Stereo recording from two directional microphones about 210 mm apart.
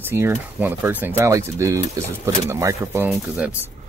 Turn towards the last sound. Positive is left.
turn(degrees=-10)  # may be behind; listen again after turning